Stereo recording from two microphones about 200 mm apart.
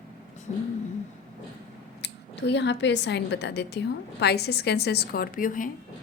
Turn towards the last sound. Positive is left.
turn(degrees=45)  # may be behind; listen again after turning